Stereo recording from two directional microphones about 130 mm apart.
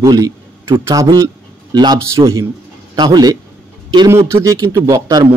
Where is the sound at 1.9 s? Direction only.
25° right (ahead or behind).